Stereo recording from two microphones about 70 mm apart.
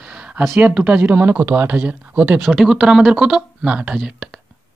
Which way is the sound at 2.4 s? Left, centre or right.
Centre.